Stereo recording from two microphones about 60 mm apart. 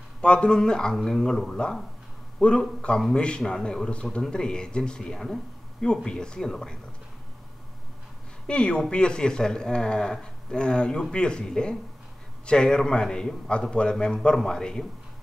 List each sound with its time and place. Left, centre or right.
0.2 s speech: centre
8.5 s speech: centre